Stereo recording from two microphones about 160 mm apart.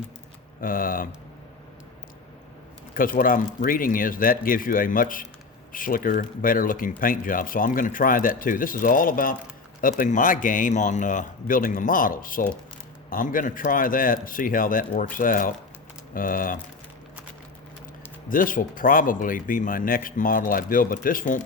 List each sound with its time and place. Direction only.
0.6 s speech: 60° left (ahead or behind)
2.9 s speech: 60° left (ahead or behind)
18.3 s speech: 60° left (ahead or behind)